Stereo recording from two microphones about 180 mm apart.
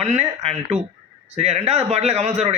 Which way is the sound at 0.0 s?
35° right (ahead or behind).